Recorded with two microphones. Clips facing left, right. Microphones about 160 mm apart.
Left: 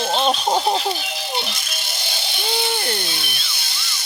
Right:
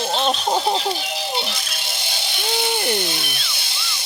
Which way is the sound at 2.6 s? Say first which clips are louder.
Right 3 dB; 15° right (ahead or behind).